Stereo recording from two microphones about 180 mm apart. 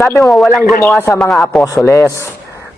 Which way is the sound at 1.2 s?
Centre (ahead or behind).